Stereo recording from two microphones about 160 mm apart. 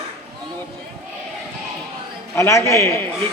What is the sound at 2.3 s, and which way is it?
Speech, 15° left (ahead or behind).